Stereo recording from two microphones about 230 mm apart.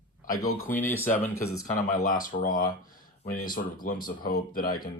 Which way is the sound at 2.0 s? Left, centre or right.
Left.